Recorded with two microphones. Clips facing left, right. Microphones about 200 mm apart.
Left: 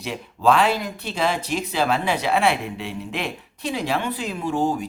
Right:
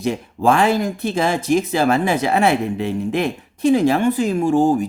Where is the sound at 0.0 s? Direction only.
45° right (ahead or behind).